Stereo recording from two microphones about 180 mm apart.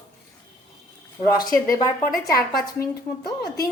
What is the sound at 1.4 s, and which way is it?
A woman's voice, 50° left (ahead or behind).